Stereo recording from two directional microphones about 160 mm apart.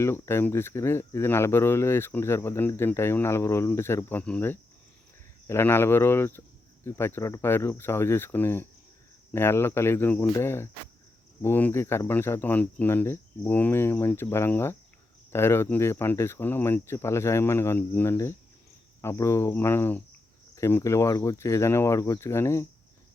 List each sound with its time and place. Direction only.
0.0 s speech: 15° left (ahead or behind)